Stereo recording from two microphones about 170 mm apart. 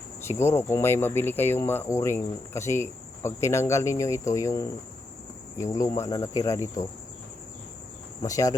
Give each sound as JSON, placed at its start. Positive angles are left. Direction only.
{"t": 0.2, "sound": "speech", "side_deg": 15}
{"t": 5.5, "sound": "cricket", "side_deg": 20}
{"t": 8.2, "sound": "cricket", "side_deg": 20}